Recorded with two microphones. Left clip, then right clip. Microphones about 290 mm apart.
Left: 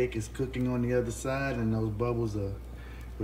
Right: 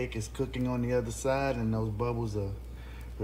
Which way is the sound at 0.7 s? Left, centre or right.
Centre.